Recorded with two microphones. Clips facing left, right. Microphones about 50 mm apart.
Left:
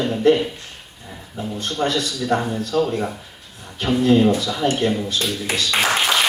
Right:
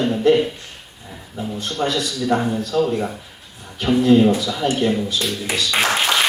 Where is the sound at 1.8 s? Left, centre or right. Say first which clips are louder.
Even; centre.